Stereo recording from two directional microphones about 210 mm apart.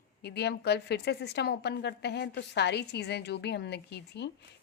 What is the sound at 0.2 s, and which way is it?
A woman's voice, 50° left (ahead or behind).